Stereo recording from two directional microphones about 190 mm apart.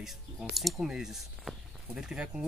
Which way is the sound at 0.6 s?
Centre (ahead or behind).